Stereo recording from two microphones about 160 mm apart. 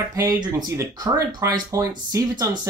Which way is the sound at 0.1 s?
20° right (ahead or behind).